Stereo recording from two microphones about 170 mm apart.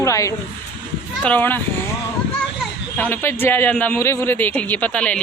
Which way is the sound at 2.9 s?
10° left (ahead or behind).